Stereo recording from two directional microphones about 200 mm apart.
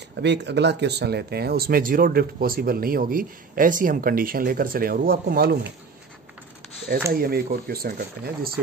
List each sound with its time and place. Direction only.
0.1 s speech: 60° right (ahead or behind)
7.1 s speech: 50° right (ahead or behind)